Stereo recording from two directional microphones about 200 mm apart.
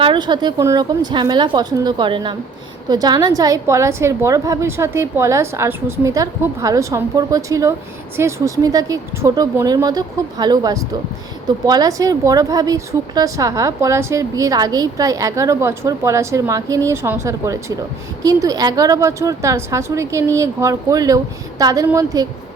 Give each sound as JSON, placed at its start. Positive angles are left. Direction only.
{"t": 0.0, "sound": "a woman's voice", "side_deg": -25}